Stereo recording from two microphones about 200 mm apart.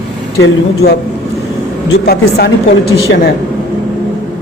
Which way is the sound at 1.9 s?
50° left (ahead or behind).